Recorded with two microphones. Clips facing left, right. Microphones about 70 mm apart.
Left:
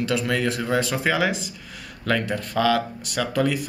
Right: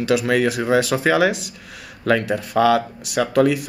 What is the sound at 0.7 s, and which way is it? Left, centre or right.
Speech, right.